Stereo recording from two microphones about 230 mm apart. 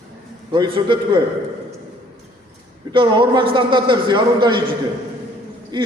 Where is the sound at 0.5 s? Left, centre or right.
Centre.